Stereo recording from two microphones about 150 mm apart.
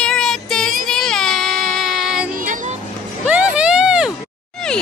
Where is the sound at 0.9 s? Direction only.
5° left (ahead or behind).